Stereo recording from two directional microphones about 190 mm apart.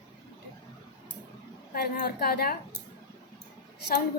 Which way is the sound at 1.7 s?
55° left (ahead or behind).